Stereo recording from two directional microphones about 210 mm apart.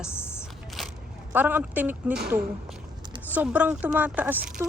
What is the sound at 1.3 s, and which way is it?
Speech, 10° right (ahead or behind).